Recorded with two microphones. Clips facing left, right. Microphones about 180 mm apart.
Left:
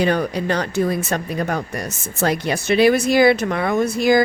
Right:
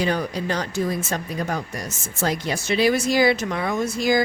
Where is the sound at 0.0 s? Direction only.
60° left (ahead or behind).